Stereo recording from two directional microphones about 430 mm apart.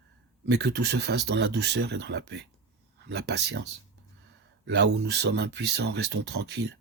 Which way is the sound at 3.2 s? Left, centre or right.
Right.